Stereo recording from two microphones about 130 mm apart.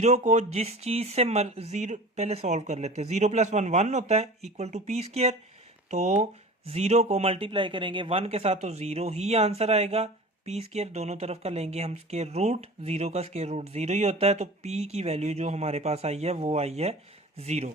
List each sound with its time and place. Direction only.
0.0 s speech: 60° right (ahead or behind)